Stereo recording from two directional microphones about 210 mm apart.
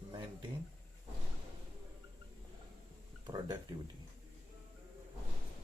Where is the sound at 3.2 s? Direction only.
20° right (ahead or behind).